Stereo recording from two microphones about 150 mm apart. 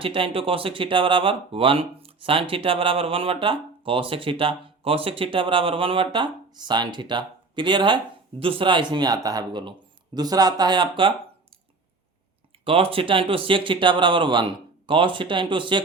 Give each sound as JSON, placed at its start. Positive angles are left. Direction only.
{"t": 0.0, "sound": "speech", "side_deg": -35}
{"t": 12.6, "sound": "speech", "side_deg": -40}